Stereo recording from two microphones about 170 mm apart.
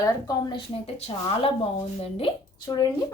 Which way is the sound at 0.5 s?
35° left (ahead or behind).